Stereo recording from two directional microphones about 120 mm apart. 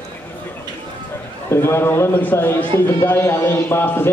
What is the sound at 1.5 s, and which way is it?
A man's voice, 20° left (ahead or behind).